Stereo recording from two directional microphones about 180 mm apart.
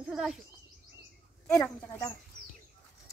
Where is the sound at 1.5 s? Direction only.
10° left (ahead or behind).